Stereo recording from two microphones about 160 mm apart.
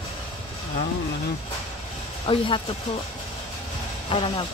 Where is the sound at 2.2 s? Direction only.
35° left (ahead or behind).